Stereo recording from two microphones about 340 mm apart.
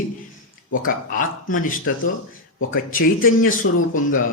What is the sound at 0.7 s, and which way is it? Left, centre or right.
A man's voice, left.